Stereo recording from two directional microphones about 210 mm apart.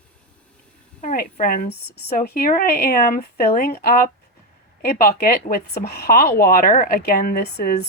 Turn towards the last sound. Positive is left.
turn(degrees=45)  # may be behind; listen again after turning